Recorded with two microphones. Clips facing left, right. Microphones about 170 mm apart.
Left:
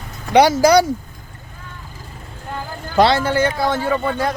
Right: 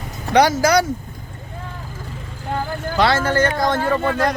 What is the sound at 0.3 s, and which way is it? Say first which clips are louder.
Speech: left 3 dB; 30° left (ahead or behind).